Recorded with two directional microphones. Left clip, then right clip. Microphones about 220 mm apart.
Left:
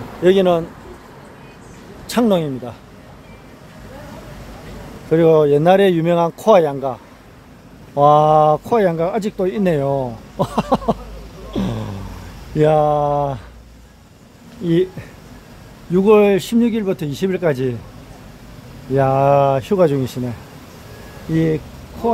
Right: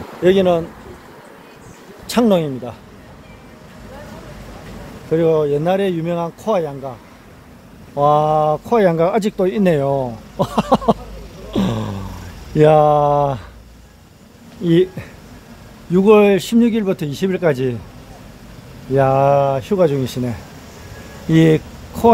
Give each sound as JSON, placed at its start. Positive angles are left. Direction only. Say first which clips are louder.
{"t": 0.2, "sound": "speech", "louder": "even", "side_deg": 0}
{"t": 2.0, "sound": "speech", "louder": "right 1 dB", "side_deg": -5}
{"t": 5.1, "sound": "speech", "louder": "left 3 dB", "side_deg": 25}
{"t": 7.9, "sound": "speech", "louder": "left 3 dB", "side_deg": 10}
{"t": 8.7, "sound": "speech", "louder": "right 2 dB", "side_deg": -10}
{"t": 11.5, "sound": "a sound", "louder": "right 4 dB", "side_deg": -20}
{"t": 12.5, "sound": "speech", "louder": "right 3 dB", "side_deg": -15}
{"t": 14.6, "sound": "speech", "louder": "right 3 dB", "side_deg": -15}
{"t": 15.9, "sound": "speech", "louder": "right 1 dB", "side_deg": -5}
{"t": 18.9, "sound": "speech", "louder": "even", "side_deg": -5}
{"t": 21.3, "sound": "speech", "louder": "right 5 dB", "side_deg": -15}